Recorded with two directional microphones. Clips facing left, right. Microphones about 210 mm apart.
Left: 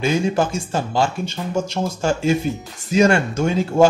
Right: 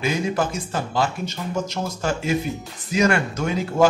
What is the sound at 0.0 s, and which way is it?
Speech, 30° left (ahead or behind).